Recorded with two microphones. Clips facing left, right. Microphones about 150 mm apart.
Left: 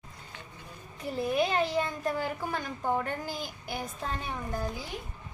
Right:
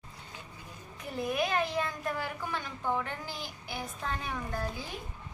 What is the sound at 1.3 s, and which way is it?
A child's voice, 30° left (ahead or behind).